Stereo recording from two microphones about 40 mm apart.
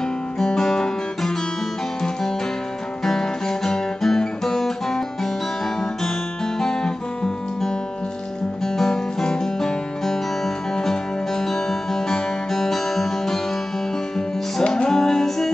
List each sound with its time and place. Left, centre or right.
0.4 s music: centre
3.1 s guitar: centre
6.6 s guitar: centre
8.7 s music: centre
14.6 s music: centre